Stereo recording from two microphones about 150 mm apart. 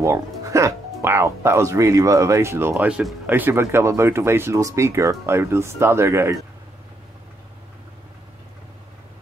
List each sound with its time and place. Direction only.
0.0 s speech: 20° right (ahead or behind)